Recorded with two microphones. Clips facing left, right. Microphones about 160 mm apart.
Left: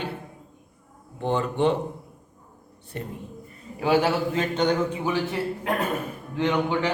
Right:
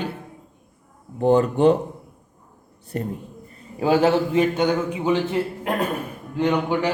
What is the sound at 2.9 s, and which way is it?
A man's voice, 40° right (ahead or behind).